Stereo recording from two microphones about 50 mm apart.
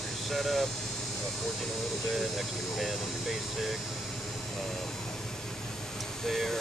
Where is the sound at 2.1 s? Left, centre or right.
Centre.